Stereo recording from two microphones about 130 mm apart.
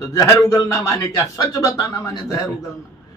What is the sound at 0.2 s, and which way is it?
A man's voice, 25° left (ahead or behind).